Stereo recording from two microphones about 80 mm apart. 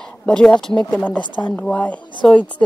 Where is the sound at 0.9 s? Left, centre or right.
Left.